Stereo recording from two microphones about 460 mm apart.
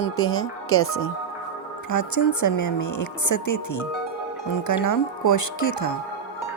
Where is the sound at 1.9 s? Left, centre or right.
Left.